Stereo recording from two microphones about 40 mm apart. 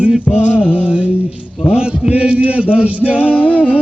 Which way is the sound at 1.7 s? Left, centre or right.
Right.